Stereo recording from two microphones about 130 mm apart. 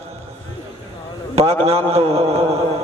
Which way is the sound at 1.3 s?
55° right (ahead or behind).